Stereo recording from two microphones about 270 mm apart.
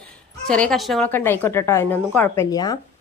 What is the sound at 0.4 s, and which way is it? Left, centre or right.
Speech, centre.